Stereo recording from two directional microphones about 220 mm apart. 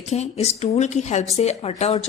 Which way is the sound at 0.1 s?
30° left (ahead or behind).